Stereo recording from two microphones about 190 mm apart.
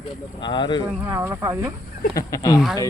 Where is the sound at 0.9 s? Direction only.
10° right (ahead or behind).